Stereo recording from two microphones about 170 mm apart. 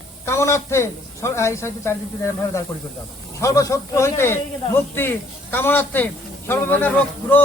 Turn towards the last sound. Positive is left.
turn(degrees=10)  # may be behind; listen again after turning